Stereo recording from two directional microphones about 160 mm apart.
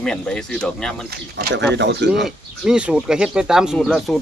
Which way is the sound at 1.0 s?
85° right.